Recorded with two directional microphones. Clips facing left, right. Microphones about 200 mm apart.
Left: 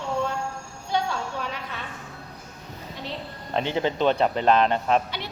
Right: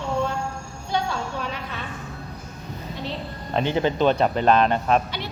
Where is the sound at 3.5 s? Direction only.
20° left (ahead or behind).